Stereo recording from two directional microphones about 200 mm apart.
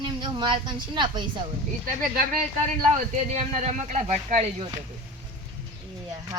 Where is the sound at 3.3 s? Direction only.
35° right (ahead or behind).